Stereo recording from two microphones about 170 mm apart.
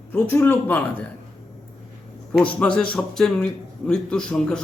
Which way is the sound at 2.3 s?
5° left (ahead or behind).